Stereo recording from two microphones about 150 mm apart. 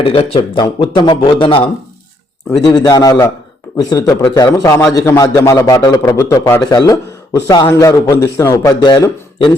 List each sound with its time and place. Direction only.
0.0 s a man's voice: 40° left (ahead or behind)
2.6 s a man's voice: 25° left (ahead or behind)